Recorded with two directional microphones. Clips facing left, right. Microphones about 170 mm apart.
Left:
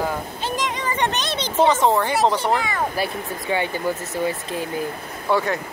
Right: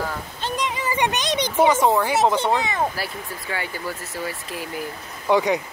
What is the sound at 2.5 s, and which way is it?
Speech, 20° right (ahead or behind).